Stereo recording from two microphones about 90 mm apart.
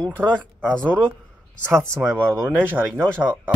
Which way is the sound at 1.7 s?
30° right (ahead or behind).